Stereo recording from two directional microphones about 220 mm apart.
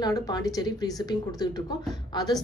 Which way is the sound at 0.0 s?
15° left (ahead or behind).